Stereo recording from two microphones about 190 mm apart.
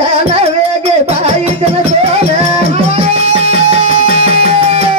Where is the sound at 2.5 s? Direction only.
35° right (ahead or behind).